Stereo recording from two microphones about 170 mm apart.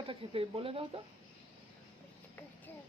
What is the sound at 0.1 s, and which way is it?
Speech, 35° right (ahead or behind).